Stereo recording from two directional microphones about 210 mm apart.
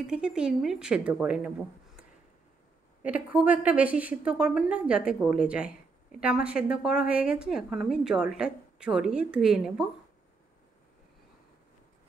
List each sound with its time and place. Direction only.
0.0 s a woman's voice: 5° right (ahead or behind)
3.0 s a woman's voice: 5° right (ahead or behind)